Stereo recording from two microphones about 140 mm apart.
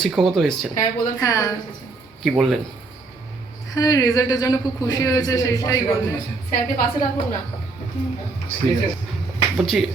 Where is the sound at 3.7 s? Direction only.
25° left (ahead or behind).